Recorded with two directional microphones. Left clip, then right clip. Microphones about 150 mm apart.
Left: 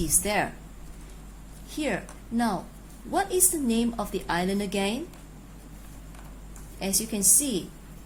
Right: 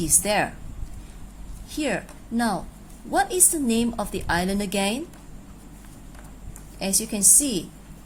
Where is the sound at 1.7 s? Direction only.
20° right (ahead or behind).